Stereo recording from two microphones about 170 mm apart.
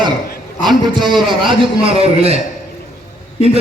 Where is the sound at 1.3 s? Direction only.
30° right (ahead or behind).